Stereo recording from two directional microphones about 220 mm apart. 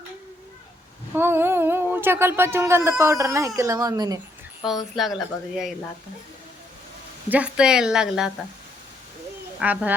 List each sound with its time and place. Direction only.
1.1 s speech: 10° right (ahead or behind)
4.6 s speech: centre (ahead or behind)
7.3 s speech: 5° right (ahead or behind)
9.6 s speech: 5° right (ahead or behind)